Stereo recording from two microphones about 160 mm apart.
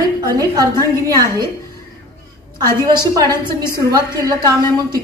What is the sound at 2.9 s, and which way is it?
A woman's voice, 25° right (ahead or behind).